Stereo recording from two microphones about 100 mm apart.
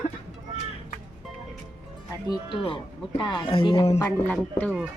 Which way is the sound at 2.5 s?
60° left (ahead or behind).